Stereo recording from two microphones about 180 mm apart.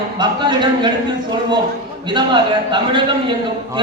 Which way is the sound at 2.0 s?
25° right (ahead or behind).